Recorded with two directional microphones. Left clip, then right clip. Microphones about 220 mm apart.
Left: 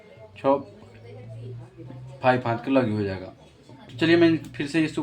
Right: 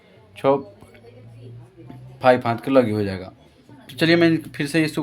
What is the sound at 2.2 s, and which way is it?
Speech, 55° right (ahead or behind).